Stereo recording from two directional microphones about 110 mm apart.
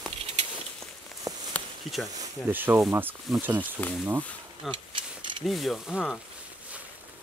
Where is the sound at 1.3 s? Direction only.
30° right (ahead or behind).